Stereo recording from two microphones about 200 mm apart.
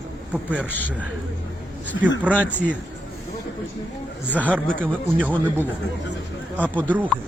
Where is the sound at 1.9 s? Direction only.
65° left (ahead or behind).